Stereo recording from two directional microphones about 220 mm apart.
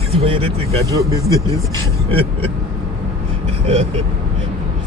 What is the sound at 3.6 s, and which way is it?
Speech, 30° right (ahead or behind).